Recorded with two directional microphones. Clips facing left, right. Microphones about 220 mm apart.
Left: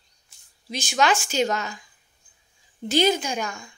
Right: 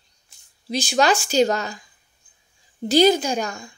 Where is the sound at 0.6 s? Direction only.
35° right (ahead or behind).